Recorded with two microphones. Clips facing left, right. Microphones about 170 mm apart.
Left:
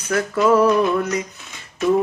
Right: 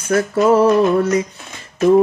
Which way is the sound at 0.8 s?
50° right (ahead or behind).